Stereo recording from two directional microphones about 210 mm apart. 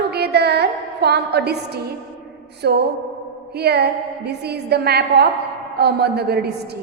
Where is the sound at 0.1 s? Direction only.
50° right (ahead or behind).